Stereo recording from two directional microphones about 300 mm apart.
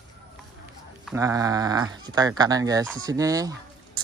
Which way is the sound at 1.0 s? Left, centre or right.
Centre.